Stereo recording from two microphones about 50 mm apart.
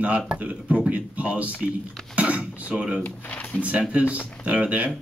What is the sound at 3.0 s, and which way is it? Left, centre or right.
Speech, left.